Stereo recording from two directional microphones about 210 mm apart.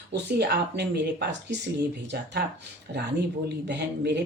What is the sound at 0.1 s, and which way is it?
Speech, 50° right (ahead or behind).